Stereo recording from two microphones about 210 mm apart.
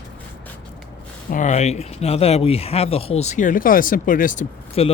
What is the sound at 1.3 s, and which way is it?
Speech, 35° left (ahead or behind).